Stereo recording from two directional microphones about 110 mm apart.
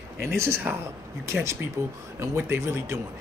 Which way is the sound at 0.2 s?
25° right (ahead or behind).